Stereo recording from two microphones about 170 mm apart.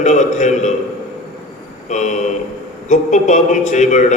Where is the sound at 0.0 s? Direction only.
45° left (ahead or behind).